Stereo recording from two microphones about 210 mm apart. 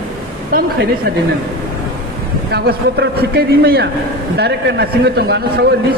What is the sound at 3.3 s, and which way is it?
A man's voice, 50° right (ahead or behind).